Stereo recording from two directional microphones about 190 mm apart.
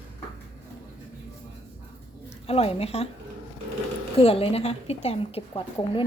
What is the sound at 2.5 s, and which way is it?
Speech, 30° left (ahead or behind).